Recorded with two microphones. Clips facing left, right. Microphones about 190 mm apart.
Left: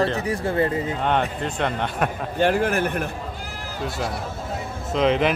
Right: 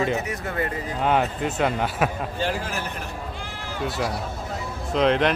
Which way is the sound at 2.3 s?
55° left (ahead or behind).